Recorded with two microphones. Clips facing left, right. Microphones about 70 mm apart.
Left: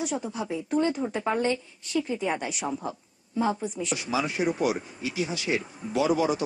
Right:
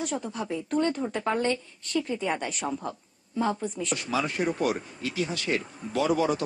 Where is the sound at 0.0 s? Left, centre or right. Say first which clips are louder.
Left 1 dB; centre.